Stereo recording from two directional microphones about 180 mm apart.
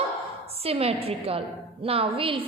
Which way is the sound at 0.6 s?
35° right (ahead or behind).